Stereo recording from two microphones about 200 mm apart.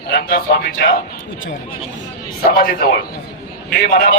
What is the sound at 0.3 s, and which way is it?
Speech, 45° left (ahead or behind).